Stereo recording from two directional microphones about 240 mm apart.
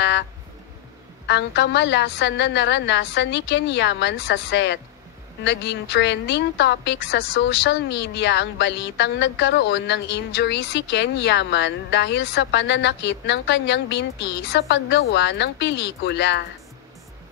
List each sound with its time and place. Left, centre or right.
1.2 s a woman's voice: left